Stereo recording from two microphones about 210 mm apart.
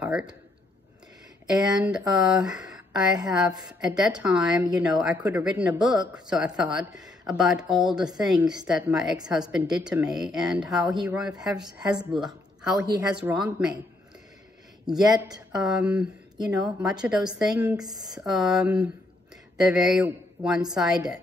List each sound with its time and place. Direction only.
0.0 s a man's voice: 5° right (ahead or behind)
1.6 s speech: 5° right (ahead or behind)
14.9 s speech: centre (ahead or behind)
17.7 s speech: 20° right (ahead or behind)
18.2 s speech: centre (ahead or behind)